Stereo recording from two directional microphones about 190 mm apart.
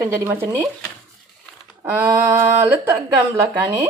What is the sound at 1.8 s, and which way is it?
Speech, 10° right (ahead or behind).